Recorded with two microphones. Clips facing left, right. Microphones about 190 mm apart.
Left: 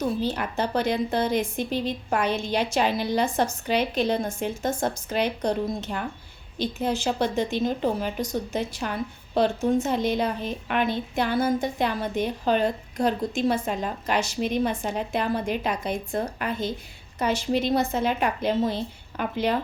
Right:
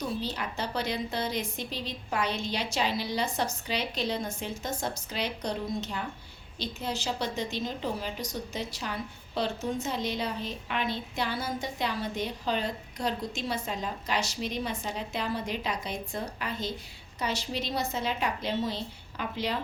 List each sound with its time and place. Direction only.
0.2 s a woman's voice: 50° left (ahead or behind)